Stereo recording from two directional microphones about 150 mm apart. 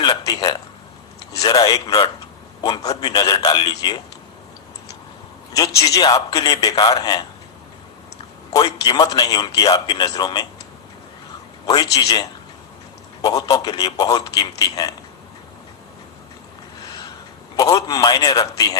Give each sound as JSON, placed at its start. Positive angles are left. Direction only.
{"t": 0.0, "sound": "a sound", "side_deg": 25}
{"t": 1.4, "sound": "a man's voice", "side_deg": 25}
{"t": 5.5, "sound": "speech", "side_deg": 25}
{"t": 8.5, "sound": "speech", "side_deg": 25}
{"t": 11.6, "sound": "speech", "side_deg": 25}
{"t": 17.6, "sound": "speech", "side_deg": 25}